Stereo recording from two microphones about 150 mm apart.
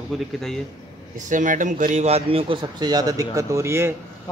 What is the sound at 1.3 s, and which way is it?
A man's voice, 60° right (ahead or behind).